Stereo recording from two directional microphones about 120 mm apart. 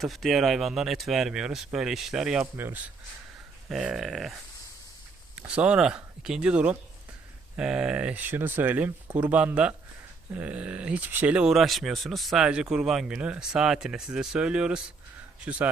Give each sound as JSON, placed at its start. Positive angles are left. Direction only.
{"t": 0.0, "sound": "speech", "side_deg": 0}
{"t": 2.6, "sound": "speech", "side_deg": -15}
{"t": 3.7, "sound": "speech", "side_deg": -5}
{"t": 5.4, "sound": "speech", "side_deg": -10}